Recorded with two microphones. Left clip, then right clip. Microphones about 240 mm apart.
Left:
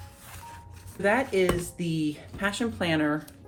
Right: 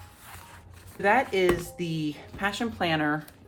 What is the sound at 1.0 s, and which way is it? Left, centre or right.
Speech, right.